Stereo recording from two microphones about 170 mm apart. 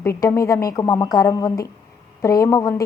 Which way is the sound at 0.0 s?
15° left (ahead or behind).